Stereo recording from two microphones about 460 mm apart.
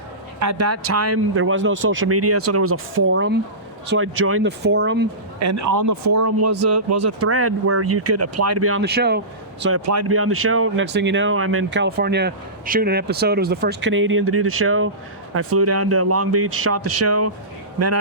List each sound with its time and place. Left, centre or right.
0.3 s speech: right
5.4 s speech: right